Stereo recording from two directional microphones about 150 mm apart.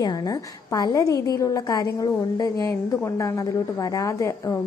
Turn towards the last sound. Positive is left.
turn(degrees=20)  # may be behind; listen again after turning